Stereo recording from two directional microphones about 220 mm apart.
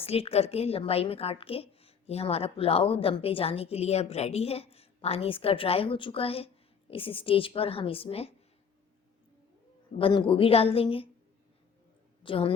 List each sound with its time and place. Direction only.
0.0 s a woman's voice: 25° left (ahead or behind)
10.0 s a woman's voice: 25° left (ahead or behind)
12.2 s a woman's voice: 25° left (ahead or behind)